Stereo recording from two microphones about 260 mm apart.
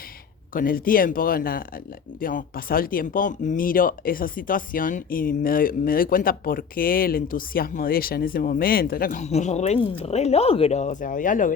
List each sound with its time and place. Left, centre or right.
0.5 s speech: left